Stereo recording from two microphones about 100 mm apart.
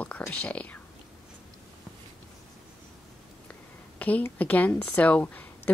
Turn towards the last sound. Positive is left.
turn(degrees=15)  # may be behind; listen again after turning